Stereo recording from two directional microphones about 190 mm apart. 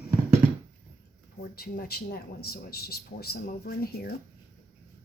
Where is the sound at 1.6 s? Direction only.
50° left (ahead or behind).